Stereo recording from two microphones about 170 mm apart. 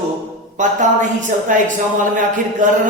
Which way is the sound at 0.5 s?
45° right (ahead or behind).